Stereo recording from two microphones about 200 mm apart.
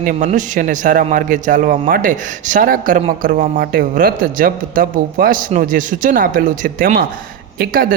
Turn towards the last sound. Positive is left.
turn(degrees=-45)  # may be behind; listen again after turning